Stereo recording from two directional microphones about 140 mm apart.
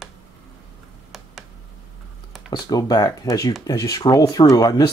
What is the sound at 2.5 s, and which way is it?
Speech, 25° left (ahead or behind).